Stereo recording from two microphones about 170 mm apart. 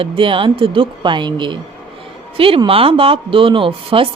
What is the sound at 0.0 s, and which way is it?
Speech, 30° right (ahead or behind).